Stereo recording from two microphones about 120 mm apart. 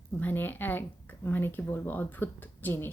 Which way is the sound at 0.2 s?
15° left (ahead or behind).